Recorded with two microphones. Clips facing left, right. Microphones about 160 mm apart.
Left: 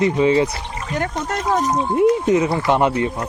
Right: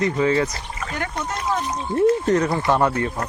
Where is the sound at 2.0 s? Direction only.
15° left (ahead or behind).